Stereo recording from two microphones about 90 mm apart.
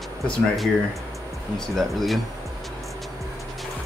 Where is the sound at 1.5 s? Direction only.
Centre (ahead or behind).